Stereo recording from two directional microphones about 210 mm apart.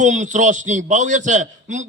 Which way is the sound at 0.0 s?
35° right (ahead or behind).